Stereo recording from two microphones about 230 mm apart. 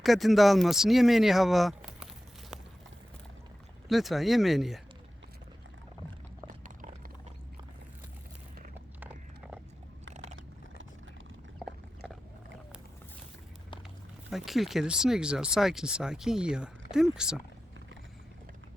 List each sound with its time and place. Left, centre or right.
0.0 s speech: centre
3.8 s speech: centre
6.5 s clip-clop: right
9.0 s horse: centre
12.0 s a sound: centre
14.3 s speech: centre